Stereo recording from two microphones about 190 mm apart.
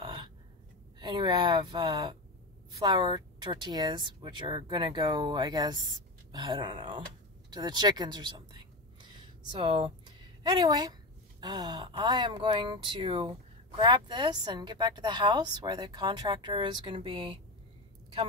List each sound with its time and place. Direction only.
0.0 s gasp: 25° right (ahead or behind)
0.9 s a woman's voice: 25° right (ahead or behind)